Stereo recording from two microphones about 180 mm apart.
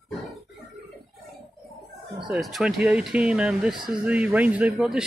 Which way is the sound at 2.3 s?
Centre (ahead or behind).